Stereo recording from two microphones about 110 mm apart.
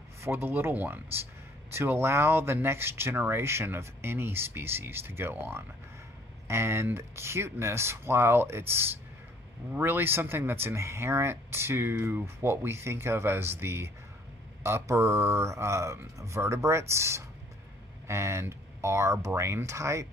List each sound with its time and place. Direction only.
0.2 s speech: 20° right (ahead or behind)